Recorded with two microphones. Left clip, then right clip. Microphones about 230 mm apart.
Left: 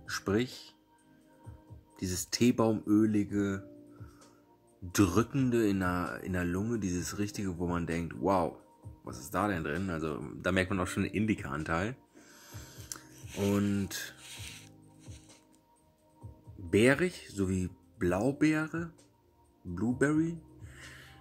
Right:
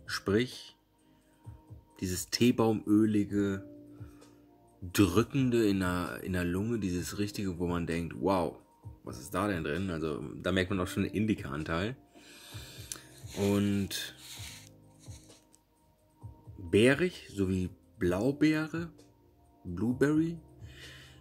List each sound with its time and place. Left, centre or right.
0.0 s speech: centre
2.0 s speech: centre
4.9 s speech: centre
15.0 s music: right
16.7 s speech: centre
19.7 s music: centre